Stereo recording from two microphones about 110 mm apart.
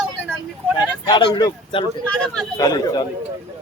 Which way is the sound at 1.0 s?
40° left (ahead or behind).